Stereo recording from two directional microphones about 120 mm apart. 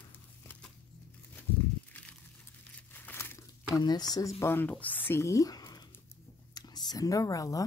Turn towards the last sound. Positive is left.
turn(degrees=30)  # may be behind; listen again after turning